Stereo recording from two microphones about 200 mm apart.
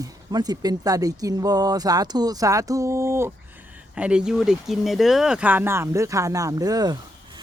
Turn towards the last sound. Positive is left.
turn(degrees=-20)  # may be behind; listen again after turning